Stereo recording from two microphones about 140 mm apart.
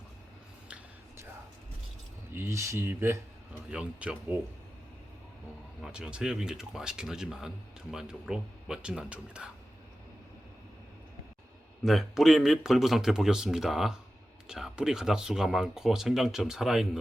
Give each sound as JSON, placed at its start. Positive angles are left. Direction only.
{"t": 2.3, "sound": "speech", "side_deg": -20}
{"t": 3.7, "sound": "speech", "side_deg": -5}
{"t": 5.8, "sound": "speech", "side_deg": -5}
{"t": 11.8, "sound": "speech", "side_deg": 0}